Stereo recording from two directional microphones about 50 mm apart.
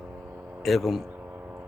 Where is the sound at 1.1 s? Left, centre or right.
Right.